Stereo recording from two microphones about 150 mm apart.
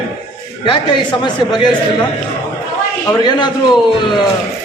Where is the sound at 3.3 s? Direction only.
30° left (ahead or behind).